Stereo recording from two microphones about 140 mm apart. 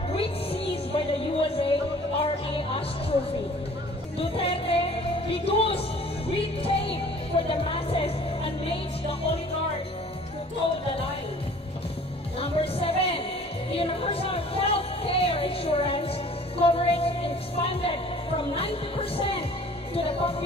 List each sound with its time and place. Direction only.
0.1 s music: 45° left (ahead or behind)
4.2 s speech: 40° left (ahead or behind)
6.3 s music: 40° left (ahead or behind)
12.4 s music: 45° left (ahead or behind)
18.4 s speech: 40° left (ahead or behind)